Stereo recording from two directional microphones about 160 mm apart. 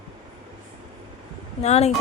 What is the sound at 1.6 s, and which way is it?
Speech, 45° left (ahead or behind).